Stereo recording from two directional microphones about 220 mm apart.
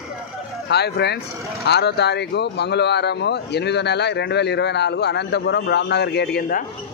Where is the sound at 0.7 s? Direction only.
50° left (ahead or behind).